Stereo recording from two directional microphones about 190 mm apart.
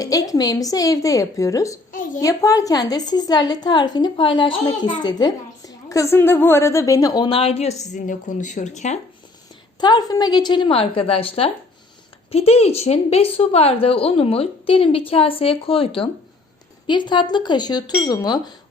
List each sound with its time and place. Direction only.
0.0 s a woman's voice: 20° left (ahead or behind)
1.9 s a sound: 45° left (ahead or behind)
2.2 s a woman's voice: 15° left (ahead or behind); by 9.0 s 40° left (ahead or behind)
9.8 s a woman's voice: 20° left (ahead or behind)